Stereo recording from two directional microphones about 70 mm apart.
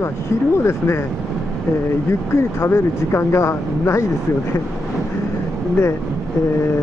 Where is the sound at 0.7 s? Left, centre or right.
Left.